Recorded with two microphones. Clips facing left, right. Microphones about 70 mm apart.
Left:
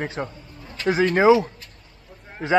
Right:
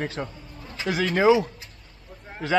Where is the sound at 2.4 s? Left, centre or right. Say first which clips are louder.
Left 3 dB; left.